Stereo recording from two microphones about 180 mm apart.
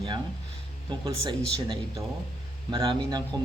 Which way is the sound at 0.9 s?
25° right (ahead or behind).